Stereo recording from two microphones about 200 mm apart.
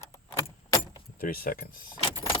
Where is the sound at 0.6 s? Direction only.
20° left (ahead or behind).